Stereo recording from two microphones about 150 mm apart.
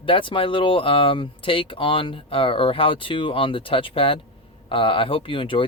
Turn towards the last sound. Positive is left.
turn(degrees=35)  # may be behind; listen again after turning